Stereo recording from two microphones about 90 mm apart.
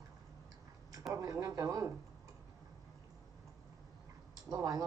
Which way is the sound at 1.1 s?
40° right (ahead or behind).